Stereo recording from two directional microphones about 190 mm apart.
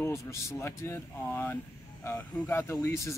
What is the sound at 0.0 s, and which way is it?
Speech, 15° left (ahead or behind).